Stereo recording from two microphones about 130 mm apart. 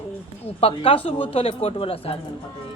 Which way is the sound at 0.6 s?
45° left (ahead or behind).